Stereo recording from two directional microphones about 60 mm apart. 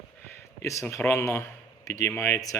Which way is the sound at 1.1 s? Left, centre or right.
Left.